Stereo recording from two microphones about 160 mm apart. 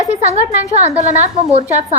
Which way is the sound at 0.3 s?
45° right (ahead or behind).